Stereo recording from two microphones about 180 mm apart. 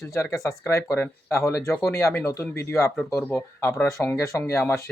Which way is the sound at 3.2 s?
15° left (ahead or behind).